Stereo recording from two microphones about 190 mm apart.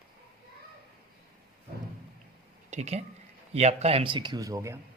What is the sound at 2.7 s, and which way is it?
Speech, 35° right (ahead or behind).